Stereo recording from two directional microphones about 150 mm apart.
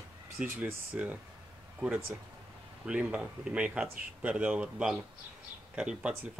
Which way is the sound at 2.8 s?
10° right (ahead or behind).